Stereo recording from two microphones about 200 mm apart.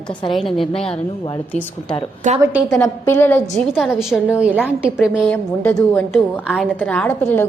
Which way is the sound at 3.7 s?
Centre (ahead or behind).